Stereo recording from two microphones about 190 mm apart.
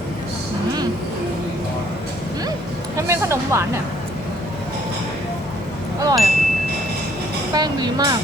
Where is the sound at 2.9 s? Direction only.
15° right (ahead or behind).